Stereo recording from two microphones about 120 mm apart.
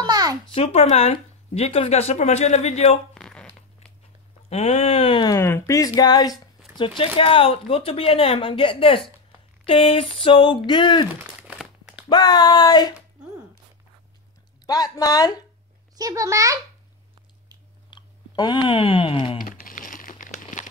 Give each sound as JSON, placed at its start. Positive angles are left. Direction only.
{"t": 0.0, "sound": "a sound", "side_deg": -30}
{"t": 0.7, "sound": "a woman's voice", "side_deg": 55}
{"t": 3.2, "sound": "zipper", "side_deg": 5}
{"t": 4.5, "sound": "a woman's voice", "side_deg": 60}
{"t": 5.1, "sound": "speech", "side_deg": 35}
{"t": 7.2, "sound": "speech", "side_deg": 50}
{"t": 11.4, "sound": "crumpling", "side_deg": -5}
{"t": 12.1, "sound": "speech", "side_deg": 35}
{"t": 14.7, "sound": "speech", "side_deg": 30}
{"t": 16.0, "sound": "a child's voice", "side_deg": -30}
{"t": 17.8, "sound": "speech", "side_deg": 40}
{"t": 19.7, "sound": "crumpling", "side_deg": 90}